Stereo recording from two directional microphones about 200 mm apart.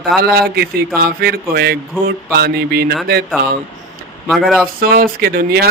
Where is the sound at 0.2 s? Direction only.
50° right (ahead or behind).